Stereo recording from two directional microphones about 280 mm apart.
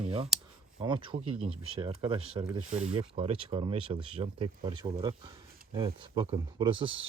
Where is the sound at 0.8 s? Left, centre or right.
Centre.